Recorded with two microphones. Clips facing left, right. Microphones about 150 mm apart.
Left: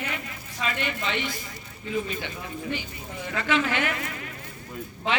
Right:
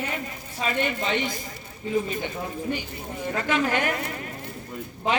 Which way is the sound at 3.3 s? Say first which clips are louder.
Right 1 dB; 45° right (ahead or behind).